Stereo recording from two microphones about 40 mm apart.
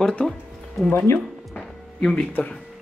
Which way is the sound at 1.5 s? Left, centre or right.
Centre.